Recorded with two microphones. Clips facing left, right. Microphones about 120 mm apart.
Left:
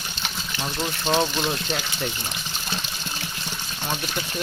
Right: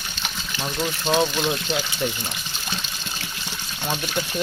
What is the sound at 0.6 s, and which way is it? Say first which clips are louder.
Speech: right 2 dB; centre (ahead or behind).